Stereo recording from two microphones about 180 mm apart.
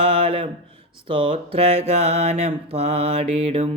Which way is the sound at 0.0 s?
30° right (ahead or behind).